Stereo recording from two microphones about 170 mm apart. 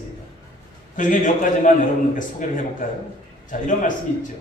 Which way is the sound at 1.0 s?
50° left (ahead or behind).